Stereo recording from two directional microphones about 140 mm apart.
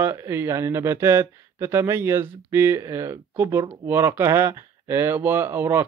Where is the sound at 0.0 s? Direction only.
15° right (ahead or behind).